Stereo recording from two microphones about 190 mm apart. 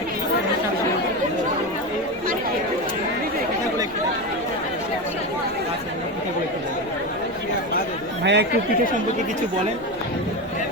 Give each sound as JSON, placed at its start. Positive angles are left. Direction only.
{"t": 8.2, "sound": "chatter", "side_deg": -65}